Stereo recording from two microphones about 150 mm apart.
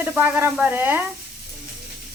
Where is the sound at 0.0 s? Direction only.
15° right (ahead or behind).